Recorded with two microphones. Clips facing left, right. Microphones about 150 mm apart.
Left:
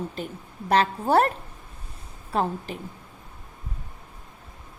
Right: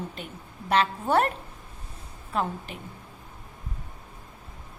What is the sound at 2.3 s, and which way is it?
Speech, 35° left (ahead or behind).